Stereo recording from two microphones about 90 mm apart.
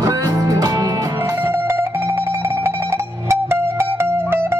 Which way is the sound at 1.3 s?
25° right (ahead or behind).